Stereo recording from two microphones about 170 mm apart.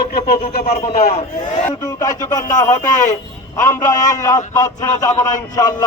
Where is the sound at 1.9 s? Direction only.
20° left (ahead or behind).